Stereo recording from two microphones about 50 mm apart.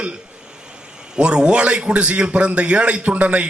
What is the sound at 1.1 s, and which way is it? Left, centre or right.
A man's voice, centre.